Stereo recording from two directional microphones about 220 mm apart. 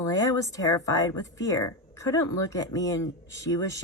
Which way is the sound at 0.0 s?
15° left (ahead or behind).